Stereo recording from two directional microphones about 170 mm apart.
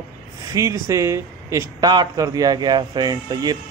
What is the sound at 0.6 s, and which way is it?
Speech, 15° right (ahead or behind).